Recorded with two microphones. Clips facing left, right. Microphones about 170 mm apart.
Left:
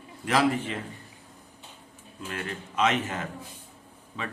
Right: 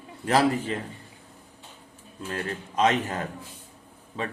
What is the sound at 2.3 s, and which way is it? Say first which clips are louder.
Speech: right 3 dB; 35° right (ahead or behind).